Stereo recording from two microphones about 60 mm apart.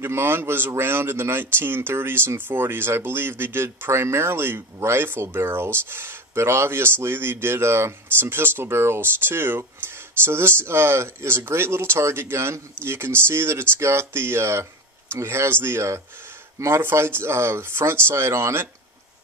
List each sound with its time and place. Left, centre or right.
0.0 s speech: right